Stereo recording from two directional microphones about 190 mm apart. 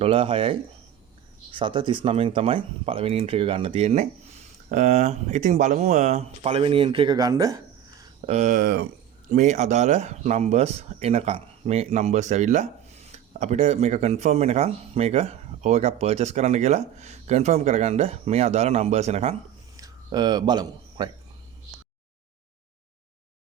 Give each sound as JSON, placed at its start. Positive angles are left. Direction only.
{"t": 0.0, "sound": "speech", "side_deg": -30}
{"t": 8.3, "sound": "speech", "side_deg": -40}
{"t": 9.3, "sound": "speech", "side_deg": -40}
{"t": 19.7, "sound": "a sound", "side_deg": -20}